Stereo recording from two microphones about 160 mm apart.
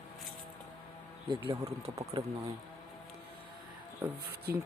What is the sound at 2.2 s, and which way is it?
Speech, 30° right (ahead or behind).